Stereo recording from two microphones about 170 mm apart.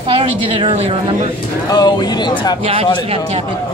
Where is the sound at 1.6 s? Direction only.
25° left (ahead or behind).